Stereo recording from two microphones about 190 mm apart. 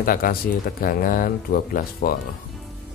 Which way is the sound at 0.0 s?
50° left (ahead or behind).